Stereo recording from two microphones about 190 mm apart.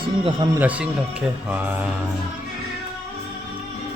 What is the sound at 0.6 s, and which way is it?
Speech, 5° right (ahead or behind).